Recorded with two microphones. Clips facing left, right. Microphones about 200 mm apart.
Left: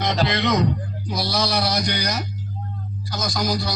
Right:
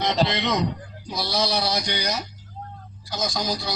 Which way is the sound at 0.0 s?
25° right (ahead or behind).